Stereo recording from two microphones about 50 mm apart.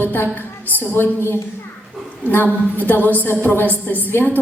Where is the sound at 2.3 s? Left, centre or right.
Left.